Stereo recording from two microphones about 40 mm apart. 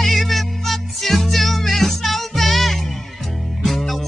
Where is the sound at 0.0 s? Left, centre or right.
Centre.